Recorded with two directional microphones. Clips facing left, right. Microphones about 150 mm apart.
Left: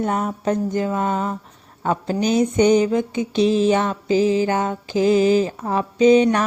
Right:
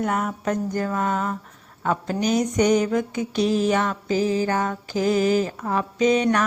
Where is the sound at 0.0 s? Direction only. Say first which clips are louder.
Left 3 dB; 30° left (ahead or behind).